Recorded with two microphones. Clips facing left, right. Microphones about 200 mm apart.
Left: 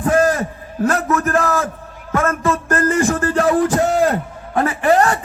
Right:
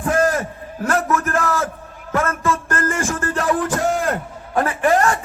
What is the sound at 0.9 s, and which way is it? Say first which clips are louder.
Music: left 2 dB; 35° left (ahead or behind).